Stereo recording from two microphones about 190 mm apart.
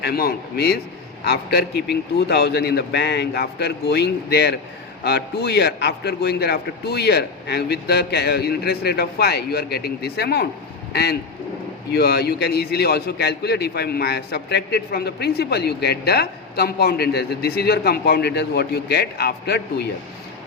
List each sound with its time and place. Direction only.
0.0 s a man's voice: 55° left (ahead or behind)